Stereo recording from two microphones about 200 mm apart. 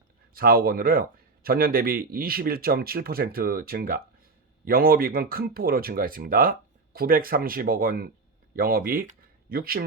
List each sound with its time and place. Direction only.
0.3 s speech: 45° right (ahead or behind)